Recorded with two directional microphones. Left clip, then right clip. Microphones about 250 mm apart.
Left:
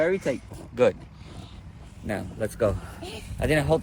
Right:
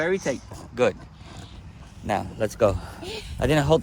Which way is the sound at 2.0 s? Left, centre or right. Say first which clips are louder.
Right 5 dB; right.